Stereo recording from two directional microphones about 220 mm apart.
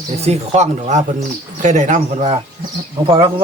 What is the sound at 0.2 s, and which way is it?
Speech, 30° right (ahead or behind).